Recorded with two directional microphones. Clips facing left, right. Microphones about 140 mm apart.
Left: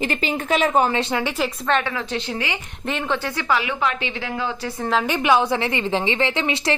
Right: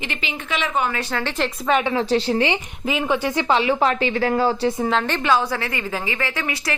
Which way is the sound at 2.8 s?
5° right (ahead or behind).